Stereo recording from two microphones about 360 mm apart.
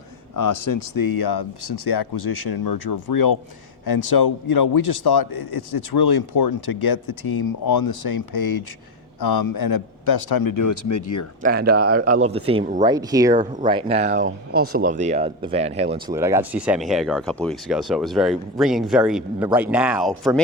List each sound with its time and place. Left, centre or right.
0.3 s a man's voice: left
3.8 s a man's voice: left
11.4 s speech: right; by 20.4 s centre